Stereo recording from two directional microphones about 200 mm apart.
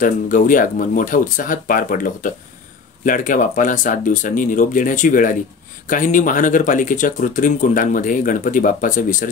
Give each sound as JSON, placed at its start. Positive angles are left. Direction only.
{"t": 0.0, "sound": "speech", "side_deg": 40}